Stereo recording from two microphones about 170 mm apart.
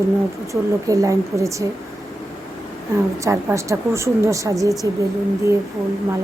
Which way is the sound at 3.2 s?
15° right (ahead or behind).